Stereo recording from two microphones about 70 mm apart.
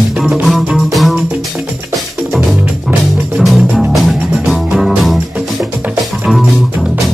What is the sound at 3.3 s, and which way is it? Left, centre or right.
Music, centre.